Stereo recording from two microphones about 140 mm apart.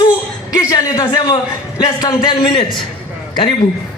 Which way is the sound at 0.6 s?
25° left (ahead or behind).